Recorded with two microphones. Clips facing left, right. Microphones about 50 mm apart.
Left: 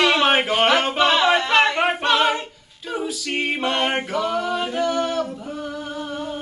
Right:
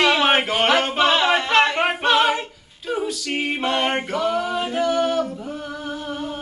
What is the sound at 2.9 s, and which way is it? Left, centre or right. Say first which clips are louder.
A capella: right 1 dB; centre.